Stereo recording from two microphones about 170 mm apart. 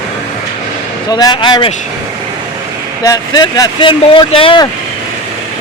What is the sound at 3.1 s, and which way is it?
Speech, 20° left (ahead or behind).